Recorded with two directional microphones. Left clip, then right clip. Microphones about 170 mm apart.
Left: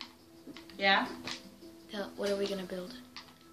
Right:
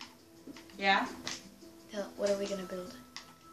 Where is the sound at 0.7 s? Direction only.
55° left (ahead or behind).